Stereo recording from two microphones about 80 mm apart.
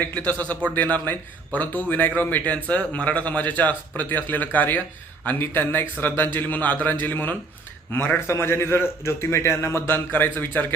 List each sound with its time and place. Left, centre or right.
0.0 s a man's voice: centre